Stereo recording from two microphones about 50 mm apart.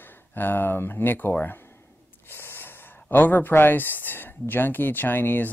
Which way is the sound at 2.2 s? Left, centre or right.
Left.